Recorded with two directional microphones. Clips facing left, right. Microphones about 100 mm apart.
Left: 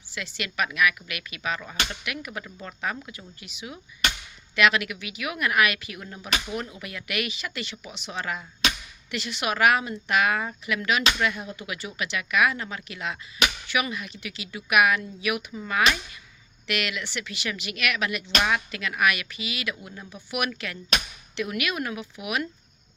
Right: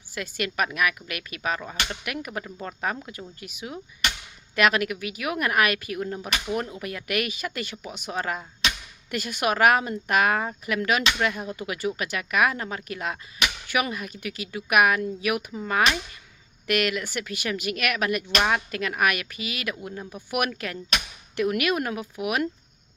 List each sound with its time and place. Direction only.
0.1 s speech: 45° right (ahead or behind)